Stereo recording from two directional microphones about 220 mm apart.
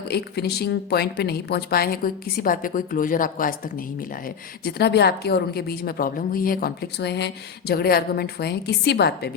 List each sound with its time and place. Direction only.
0.1 s a woman's voice: 45° left (ahead or behind)
4.6 s a woman's voice: 45° left (ahead or behind)